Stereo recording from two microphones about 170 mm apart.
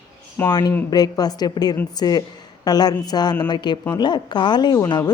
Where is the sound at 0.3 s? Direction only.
20° left (ahead or behind).